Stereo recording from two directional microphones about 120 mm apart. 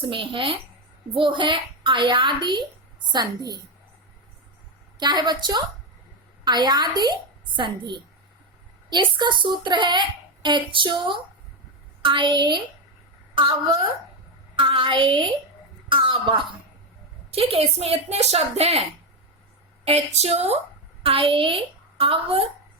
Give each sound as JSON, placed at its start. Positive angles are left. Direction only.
{"t": 0.0, "sound": "a woman's voice", "side_deg": -45}
{"t": 4.9, "sound": "a child's voice", "side_deg": -35}
{"t": 17.3, "sound": "speech", "side_deg": -55}
{"t": 21.0, "sound": "a woman's voice", "side_deg": -50}